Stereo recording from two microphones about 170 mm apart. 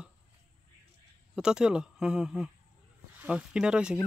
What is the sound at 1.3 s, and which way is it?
Speech, 5° right (ahead or behind).